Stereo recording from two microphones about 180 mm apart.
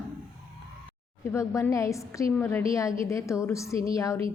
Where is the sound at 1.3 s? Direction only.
15° left (ahead or behind).